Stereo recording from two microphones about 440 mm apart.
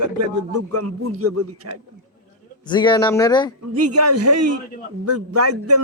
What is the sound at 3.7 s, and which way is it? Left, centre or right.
A man's voice, right.